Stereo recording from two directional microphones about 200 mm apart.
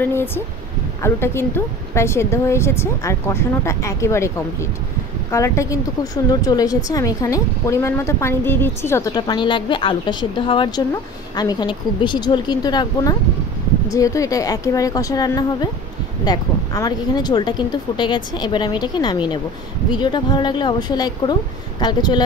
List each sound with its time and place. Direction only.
0.0 s a woman's voice: 10° left (ahead or behind)